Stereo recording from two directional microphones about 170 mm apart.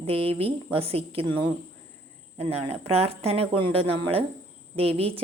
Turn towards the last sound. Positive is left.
turn(degrees=-35)  # may be behind; listen again after turning